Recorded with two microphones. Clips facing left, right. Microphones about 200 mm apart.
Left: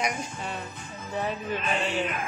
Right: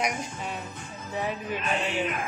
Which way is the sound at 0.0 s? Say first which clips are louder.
Even; 10° right (ahead or behind).